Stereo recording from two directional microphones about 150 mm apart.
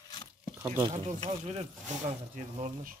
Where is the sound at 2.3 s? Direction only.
65° right (ahead or behind).